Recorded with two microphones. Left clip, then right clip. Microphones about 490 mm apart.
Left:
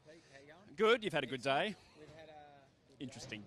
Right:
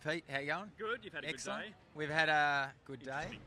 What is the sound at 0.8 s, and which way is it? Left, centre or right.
Speech, left.